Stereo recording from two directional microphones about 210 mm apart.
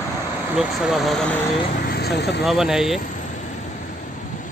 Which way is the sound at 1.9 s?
50° left (ahead or behind).